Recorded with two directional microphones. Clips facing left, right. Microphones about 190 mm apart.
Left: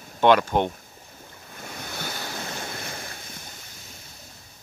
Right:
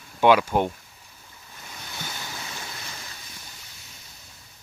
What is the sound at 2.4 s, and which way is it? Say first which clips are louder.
Waves: left 5 dB; 50° left (ahead or behind).